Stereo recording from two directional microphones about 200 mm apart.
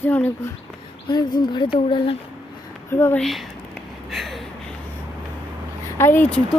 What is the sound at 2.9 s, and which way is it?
Speech, 10° left (ahead or behind).